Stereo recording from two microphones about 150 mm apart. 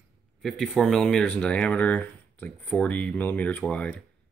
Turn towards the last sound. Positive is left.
turn(degrees=10)  # may be behind; listen again after turning